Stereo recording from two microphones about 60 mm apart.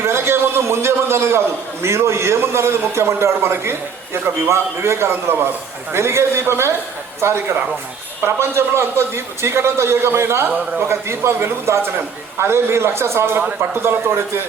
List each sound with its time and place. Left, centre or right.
0.0 s a man's voice: right